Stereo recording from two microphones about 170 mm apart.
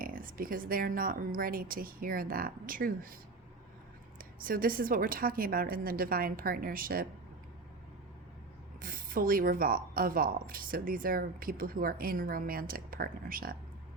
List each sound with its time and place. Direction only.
0.0 s a woman's voice: 55° right (ahead or behind)
4.2 s a woman's voice: 55° right (ahead or behind)
8.8 s a woman's voice: 55° right (ahead or behind)